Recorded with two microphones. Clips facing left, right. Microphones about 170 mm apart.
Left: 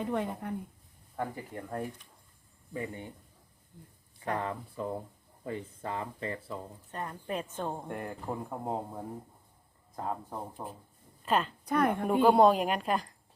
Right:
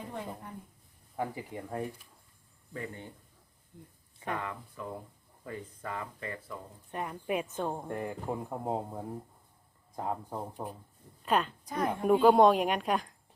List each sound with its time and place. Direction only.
0.0 s a woman's voice: 70° left (ahead or behind)
1.1 s speech: 5° right (ahead or behind)
2.7 s speech: 20° left (ahead or behind)
4.4 s speech: 30° left (ahead or behind)
6.9 s speech: 10° right (ahead or behind)
10.3 s a woman's voice: centre (ahead or behind)
11.6 s speech: 60° left (ahead or behind)
12.0 s speech: centre (ahead or behind)